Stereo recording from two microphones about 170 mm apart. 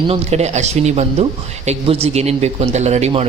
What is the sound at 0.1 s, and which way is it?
Speech, 40° right (ahead or behind).